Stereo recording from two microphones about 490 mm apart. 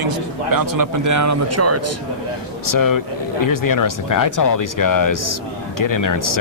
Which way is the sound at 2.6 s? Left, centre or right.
Left.